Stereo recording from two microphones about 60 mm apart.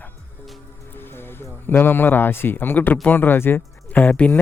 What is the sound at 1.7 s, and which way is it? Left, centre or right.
Speech, left.